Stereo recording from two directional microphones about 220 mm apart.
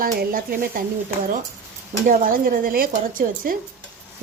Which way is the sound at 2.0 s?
40° right (ahead or behind).